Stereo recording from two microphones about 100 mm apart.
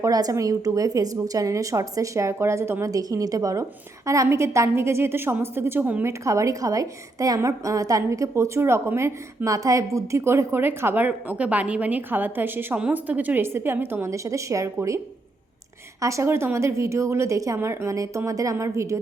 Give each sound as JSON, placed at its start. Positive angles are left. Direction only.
{"t": 0.0, "sound": "a woman's voice", "side_deg": -35}